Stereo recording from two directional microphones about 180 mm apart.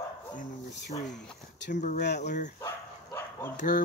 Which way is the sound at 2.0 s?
70° left (ahead or behind).